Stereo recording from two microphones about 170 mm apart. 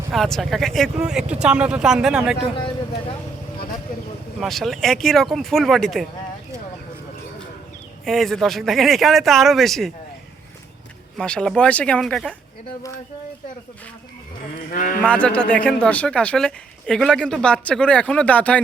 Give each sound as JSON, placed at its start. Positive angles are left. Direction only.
{"t": 0.1, "sound": "speech", "side_deg": 0}
{"t": 2.6, "sound": "a sound", "side_deg": 30}
{"t": 4.4, "sound": "speech", "side_deg": 0}
{"t": 8.0, "sound": "speech", "side_deg": 0}
{"t": 11.2, "sound": "speech", "side_deg": 5}
{"t": 14.7, "sound": "a man's voice", "side_deg": 50}
{"t": 15.0, "sound": "a woman's voice", "side_deg": 5}